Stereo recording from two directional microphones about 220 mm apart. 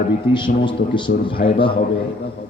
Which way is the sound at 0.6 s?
20° left (ahead or behind).